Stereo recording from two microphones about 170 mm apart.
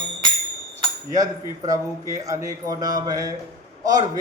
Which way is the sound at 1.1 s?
20° right (ahead or behind).